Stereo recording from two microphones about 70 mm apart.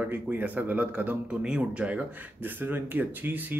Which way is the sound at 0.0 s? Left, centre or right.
Right.